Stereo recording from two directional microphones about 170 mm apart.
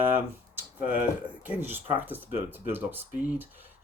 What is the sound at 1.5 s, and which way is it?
Speech, 10° right (ahead or behind).